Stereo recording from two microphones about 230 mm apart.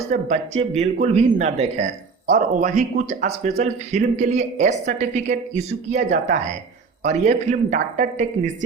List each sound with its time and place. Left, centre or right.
0.1 s speech: right